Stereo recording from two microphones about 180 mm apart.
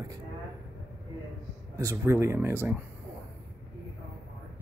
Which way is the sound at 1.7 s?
15° right (ahead or behind).